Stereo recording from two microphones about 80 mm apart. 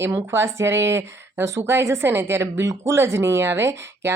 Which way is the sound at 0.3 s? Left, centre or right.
Right.